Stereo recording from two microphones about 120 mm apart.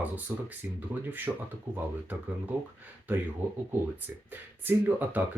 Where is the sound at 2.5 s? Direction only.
15° right (ahead or behind).